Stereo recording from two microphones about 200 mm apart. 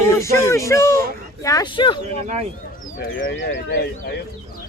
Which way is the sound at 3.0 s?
60° left (ahead or behind).